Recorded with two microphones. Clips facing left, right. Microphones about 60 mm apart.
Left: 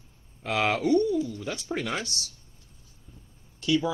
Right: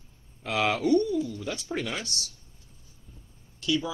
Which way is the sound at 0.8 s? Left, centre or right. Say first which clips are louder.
Even; left.